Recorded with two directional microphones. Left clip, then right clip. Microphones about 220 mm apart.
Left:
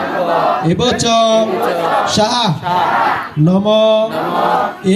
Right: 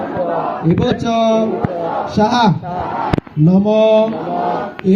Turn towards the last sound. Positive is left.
turn(degrees=40)  # may be behind; listen again after turning